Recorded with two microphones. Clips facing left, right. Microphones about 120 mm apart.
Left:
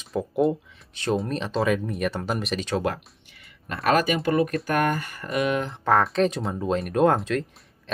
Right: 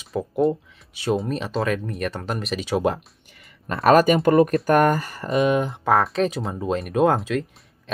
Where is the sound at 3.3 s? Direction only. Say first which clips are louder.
Right 5 dB; 40° right (ahead or behind); by 5.7 s 20° right (ahead or behind).